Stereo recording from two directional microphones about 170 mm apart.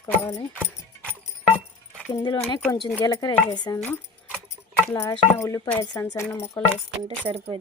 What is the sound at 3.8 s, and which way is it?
Keys jangling, 5° left (ahead or behind).